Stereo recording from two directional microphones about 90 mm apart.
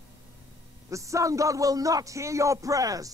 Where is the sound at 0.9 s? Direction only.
35° right (ahead or behind).